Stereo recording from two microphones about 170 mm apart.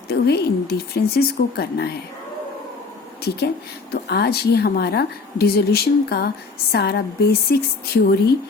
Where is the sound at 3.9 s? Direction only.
70° left (ahead or behind).